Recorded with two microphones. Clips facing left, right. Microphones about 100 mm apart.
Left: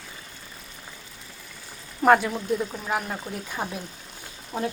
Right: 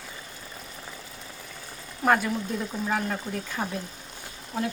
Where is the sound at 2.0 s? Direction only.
5° left (ahead or behind).